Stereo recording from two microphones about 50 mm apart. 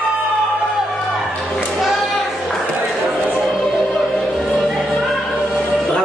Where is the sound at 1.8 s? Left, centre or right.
Centre.